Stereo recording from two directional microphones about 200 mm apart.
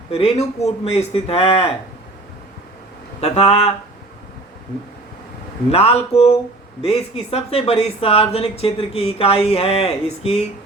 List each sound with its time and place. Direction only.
0.1 s speech: 30° left (ahead or behind)
3.2 s speech: 30° left (ahead or behind)
5.7 s speech: 30° left (ahead or behind)